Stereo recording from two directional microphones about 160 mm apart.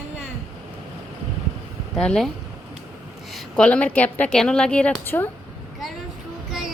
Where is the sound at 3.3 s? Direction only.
5° left (ahead or behind).